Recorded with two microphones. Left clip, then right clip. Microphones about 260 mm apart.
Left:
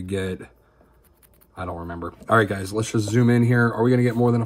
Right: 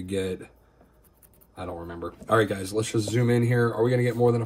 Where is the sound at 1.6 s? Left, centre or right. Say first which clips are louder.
Left 4 dB; left.